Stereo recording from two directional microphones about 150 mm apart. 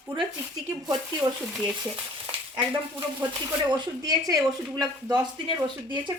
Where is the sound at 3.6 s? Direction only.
30° right (ahead or behind).